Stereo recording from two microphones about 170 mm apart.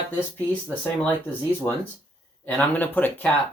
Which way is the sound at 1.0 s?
10° left (ahead or behind).